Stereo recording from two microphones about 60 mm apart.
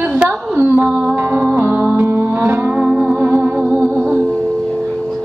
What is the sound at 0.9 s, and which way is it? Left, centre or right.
Music, centre.